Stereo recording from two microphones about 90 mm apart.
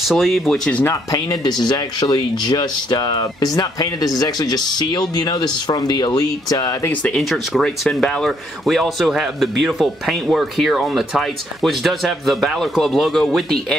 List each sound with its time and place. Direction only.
0.1 s speech: centre (ahead or behind)
1.1 s speech: 45° left (ahead or behind)
7.2 s speech: centre (ahead or behind)